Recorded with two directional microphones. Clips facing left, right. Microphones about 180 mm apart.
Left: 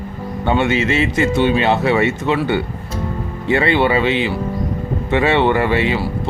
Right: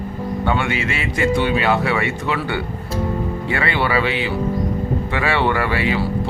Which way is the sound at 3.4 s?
25° left (ahead or behind).